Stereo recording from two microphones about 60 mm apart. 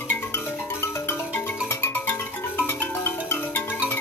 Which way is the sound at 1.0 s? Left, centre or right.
Left.